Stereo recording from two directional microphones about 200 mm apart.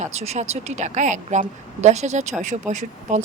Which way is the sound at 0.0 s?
30° right (ahead or behind).